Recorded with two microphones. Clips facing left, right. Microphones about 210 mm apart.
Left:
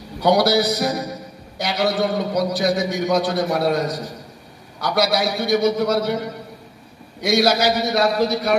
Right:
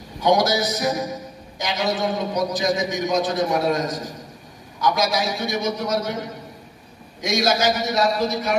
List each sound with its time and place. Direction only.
0.2 s a man's voice: 65° left (ahead or behind)
7.2 s a man's voice: 65° left (ahead or behind)